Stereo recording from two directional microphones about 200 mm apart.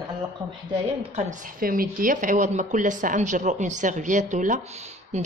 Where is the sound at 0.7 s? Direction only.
30° right (ahead or behind).